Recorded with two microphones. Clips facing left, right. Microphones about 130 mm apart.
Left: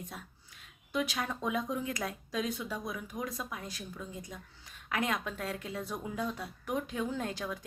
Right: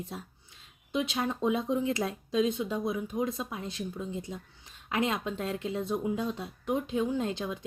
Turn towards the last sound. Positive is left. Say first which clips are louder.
# right 5 dB
turn(degrees=-25)  # may be behind; listen again after turning